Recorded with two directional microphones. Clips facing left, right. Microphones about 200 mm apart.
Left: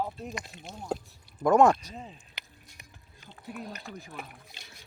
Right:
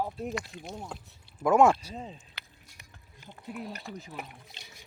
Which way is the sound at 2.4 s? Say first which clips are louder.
Left 1 dB; 15° left (ahead or behind).